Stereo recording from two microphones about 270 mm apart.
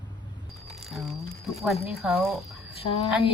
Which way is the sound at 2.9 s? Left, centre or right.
Centre.